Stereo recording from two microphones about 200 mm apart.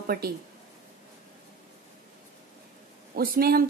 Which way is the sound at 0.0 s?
50° right (ahead or behind).